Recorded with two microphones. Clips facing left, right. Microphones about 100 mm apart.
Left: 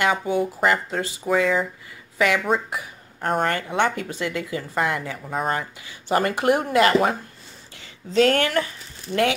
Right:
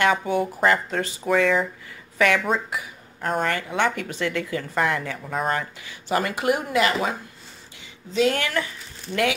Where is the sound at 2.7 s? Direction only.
35° left (ahead or behind).